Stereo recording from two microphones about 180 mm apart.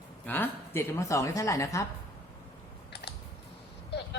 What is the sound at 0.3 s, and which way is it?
A woman's voice, 10° left (ahead or behind).